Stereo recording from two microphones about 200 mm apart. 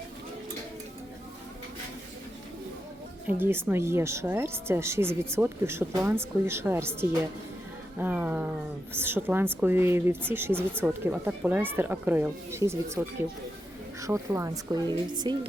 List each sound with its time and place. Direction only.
3.2 s a woman's voice: 10° right (ahead or behind)